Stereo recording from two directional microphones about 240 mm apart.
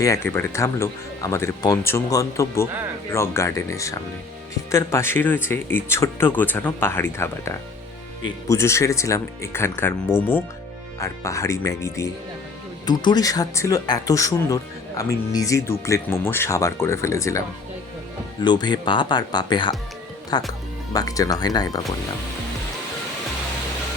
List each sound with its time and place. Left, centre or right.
0.0 s speech: centre
18.4 s speech: centre